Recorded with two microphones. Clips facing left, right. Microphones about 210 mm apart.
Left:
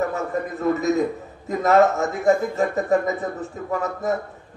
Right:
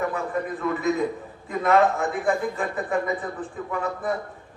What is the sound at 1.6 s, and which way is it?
A man's voice, 40° left (ahead or behind).